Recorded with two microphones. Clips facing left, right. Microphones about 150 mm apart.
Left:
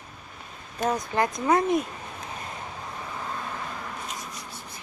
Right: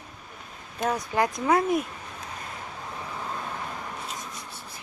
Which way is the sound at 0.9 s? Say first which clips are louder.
Even; 10° right (ahead or behind).